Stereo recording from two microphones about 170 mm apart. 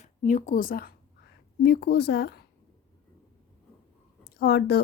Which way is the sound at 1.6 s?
75° left (ahead or behind).